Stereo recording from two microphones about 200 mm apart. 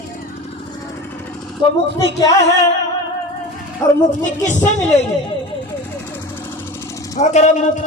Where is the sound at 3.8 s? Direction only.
20° left (ahead or behind).